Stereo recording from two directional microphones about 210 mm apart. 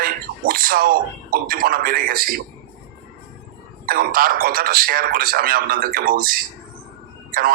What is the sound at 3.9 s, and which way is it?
Speech, 45° right (ahead or behind).